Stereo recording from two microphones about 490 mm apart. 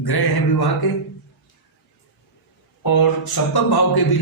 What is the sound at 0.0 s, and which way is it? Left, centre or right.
Speech, left.